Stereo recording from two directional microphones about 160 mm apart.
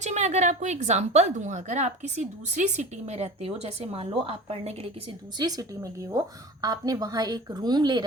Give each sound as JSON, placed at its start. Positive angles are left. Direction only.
{"t": 0.0, "sound": "a woman's voice", "side_deg": -45}
{"t": 5.4, "sound": "a woman's voice", "side_deg": -25}